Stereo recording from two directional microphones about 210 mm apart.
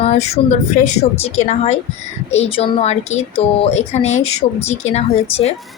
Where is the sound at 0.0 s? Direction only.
30° left (ahead or behind).